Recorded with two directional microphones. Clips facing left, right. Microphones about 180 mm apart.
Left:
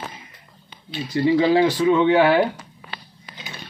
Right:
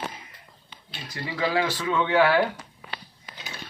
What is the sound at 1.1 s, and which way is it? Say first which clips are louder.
Speech: left 10 dB; 25° left (ahead or behind).